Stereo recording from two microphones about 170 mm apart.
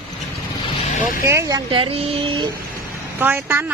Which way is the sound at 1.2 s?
15° right (ahead or behind).